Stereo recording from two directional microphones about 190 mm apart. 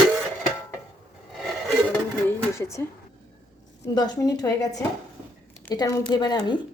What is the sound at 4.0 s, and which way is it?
Speech, 20° left (ahead or behind).